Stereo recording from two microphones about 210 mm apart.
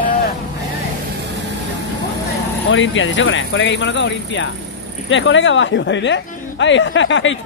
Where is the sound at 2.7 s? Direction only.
65° left (ahead or behind).